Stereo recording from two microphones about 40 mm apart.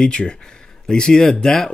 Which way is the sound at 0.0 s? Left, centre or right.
Left.